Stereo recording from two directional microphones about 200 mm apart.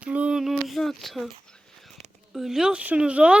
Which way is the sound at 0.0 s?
5° right (ahead or behind).